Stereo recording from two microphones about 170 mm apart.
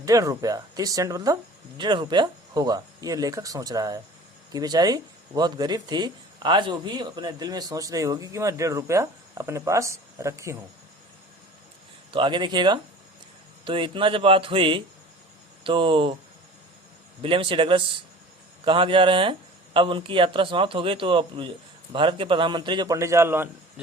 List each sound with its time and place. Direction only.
0.0 s speech: 20° right (ahead or behind)
12.1 s speech: 25° right (ahead or behind)
17.2 s speech: 30° right (ahead or behind); by 23.8 s 15° right (ahead or behind)